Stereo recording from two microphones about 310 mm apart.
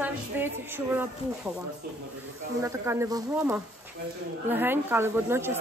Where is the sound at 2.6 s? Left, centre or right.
Centre.